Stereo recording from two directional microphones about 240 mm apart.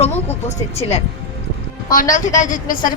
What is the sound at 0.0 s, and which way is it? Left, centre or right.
A woman's voice, left.